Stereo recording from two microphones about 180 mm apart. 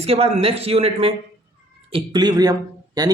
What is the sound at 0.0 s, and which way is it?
Speech, 35° right (ahead or behind).